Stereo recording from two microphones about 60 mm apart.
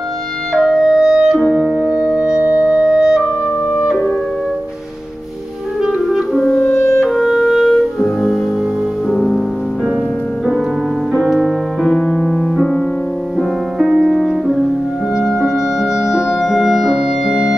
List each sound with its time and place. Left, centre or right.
0.5 s clarinet: centre
1.5 s music: centre
5.8 s clarinet: centre
6.7 s music: left
7.1 s music: centre
11.2 s music: centre
11.8 s music: centre